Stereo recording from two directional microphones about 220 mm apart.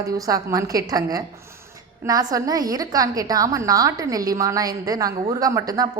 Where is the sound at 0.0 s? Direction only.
15° right (ahead or behind).